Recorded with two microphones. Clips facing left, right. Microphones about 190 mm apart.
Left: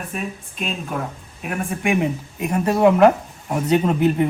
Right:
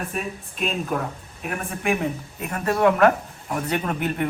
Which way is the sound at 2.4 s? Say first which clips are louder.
Left 4 dB; 15° left (ahead or behind).